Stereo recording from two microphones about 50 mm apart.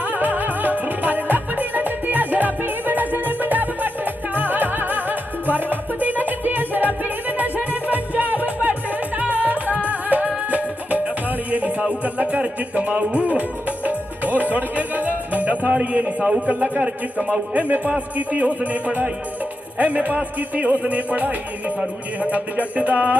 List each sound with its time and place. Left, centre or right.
0.0 s music: right
15.7 s speech: right